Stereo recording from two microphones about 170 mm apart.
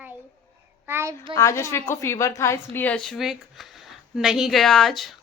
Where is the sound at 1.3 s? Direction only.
20° left (ahead or behind).